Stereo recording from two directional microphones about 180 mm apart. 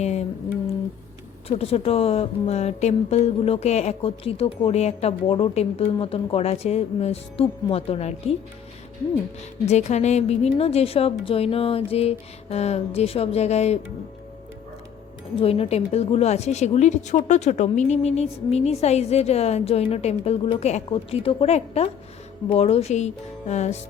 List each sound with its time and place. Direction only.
0.0 s music: 40° left (ahead or behind)
1.5 s speech: 35° left (ahead or behind)
9.6 s speech: 40° left (ahead or behind)
15.4 s speech: 30° left (ahead or behind)